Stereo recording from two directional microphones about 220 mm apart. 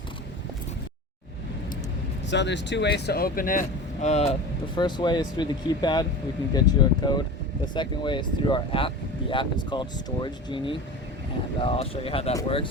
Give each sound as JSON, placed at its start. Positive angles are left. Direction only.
{"t": 2.3, "sound": "speech", "side_deg": 55}
{"t": 4.7, "sound": "speech", "side_deg": 20}